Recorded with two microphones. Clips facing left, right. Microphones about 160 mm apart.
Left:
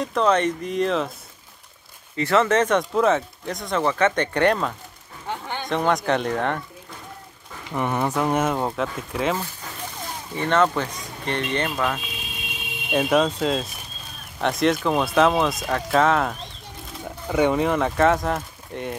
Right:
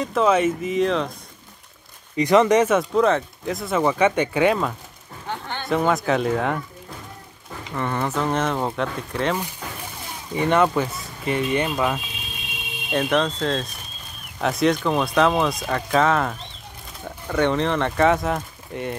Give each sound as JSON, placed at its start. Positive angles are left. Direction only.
{"t": 0.0, "sound": "speech", "side_deg": -5}
{"t": 2.1, "sound": "speech", "side_deg": -15}
{"t": 7.7, "sound": "speech", "side_deg": 15}
{"t": 10.3, "sound": "speech", "side_deg": -10}
{"t": 12.9, "sound": "speech", "side_deg": 10}